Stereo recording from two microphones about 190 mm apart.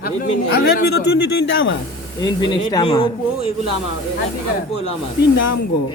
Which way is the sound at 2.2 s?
25° left (ahead or behind).